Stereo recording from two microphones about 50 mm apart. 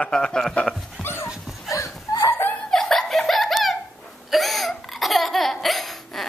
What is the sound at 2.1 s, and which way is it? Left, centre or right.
Laughter, left.